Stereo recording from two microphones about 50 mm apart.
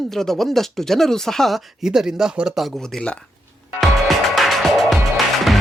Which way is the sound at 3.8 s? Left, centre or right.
Centre.